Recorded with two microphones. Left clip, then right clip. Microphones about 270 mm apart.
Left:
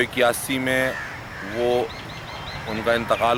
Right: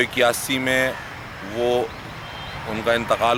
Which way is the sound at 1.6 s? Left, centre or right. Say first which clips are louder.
Right 1 dB; right.